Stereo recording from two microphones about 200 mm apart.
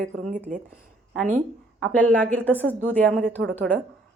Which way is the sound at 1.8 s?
5° left (ahead or behind).